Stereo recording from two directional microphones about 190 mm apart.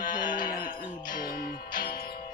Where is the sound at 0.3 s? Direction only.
45° left (ahead or behind).